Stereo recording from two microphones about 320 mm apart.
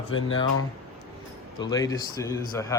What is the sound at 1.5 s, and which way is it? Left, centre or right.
Speech, centre.